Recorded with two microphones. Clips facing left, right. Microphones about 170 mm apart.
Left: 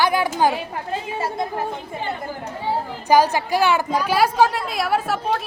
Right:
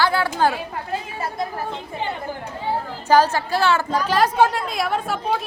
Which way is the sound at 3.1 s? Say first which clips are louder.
Even; 15° left (ahead or behind).